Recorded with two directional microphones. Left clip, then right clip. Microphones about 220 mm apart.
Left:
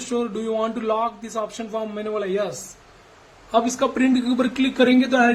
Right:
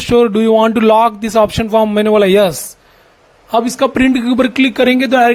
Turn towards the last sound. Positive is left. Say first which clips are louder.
# right 7 dB
turn(degrees=-40)  # may be behind; listen again after turning